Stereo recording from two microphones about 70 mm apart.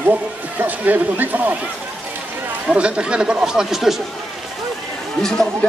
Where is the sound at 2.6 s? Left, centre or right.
Centre.